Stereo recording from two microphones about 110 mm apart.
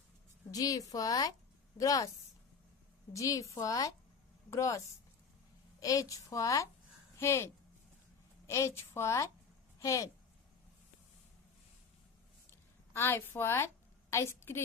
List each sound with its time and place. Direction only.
0.5 s a woman's voice: 30° left (ahead or behind)
3.1 s a woman's voice: 30° left (ahead or behind)
5.8 s a woman's voice: 30° left (ahead or behind)
12.9 s a woman's voice: 20° left (ahead or behind)